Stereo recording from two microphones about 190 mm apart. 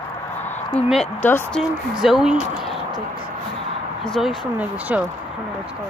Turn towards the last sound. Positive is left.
turn(degrees=-10)  # may be behind; listen again after turning